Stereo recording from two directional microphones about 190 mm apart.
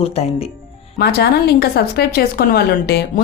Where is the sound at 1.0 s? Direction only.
55° left (ahead or behind).